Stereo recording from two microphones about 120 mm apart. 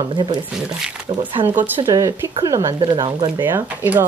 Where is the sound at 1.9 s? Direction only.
25° right (ahead or behind).